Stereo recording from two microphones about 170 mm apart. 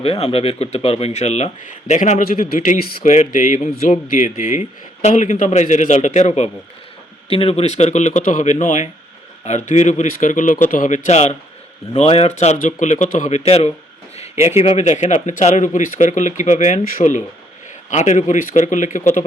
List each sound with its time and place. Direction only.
0.0 s a man's voice: 35° left (ahead or behind)